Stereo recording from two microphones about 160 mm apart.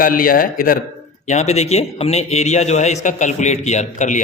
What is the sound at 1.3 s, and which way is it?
A man's voice, 45° left (ahead or behind).